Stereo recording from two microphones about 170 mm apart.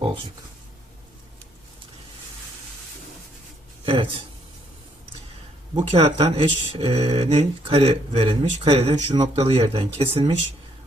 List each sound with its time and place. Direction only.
0.0 s a sound: 30° right (ahead or behind)
3.8 s speech: 30° right (ahead or behind)
5.7 s speech: 35° right (ahead or behind)